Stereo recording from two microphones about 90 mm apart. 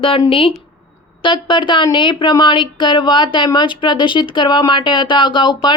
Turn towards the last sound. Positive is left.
turn(degrees=60)  # may be behind; listen again after turning